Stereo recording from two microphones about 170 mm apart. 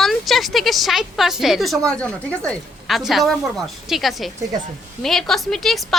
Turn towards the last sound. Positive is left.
turn(degrees=0)  # may be behind; listen again after turning